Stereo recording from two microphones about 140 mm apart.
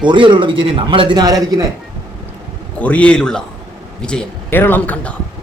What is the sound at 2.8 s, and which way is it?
Speech, 10° left (ahead or behind).